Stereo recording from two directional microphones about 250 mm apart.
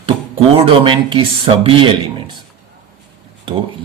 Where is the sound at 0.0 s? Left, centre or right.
Right.